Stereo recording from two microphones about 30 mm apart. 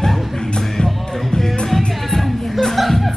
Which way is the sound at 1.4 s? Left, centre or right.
Centre.